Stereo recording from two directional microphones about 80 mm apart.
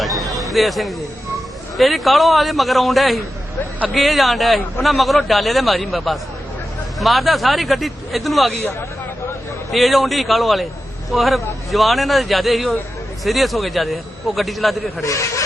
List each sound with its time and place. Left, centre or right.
0.0 s a sound: centre
0.5 s a man's voice: centre
9.7 s a man's voice: centre
15.0 s speech: left